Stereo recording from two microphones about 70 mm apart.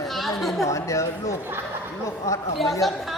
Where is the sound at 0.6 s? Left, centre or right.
Left.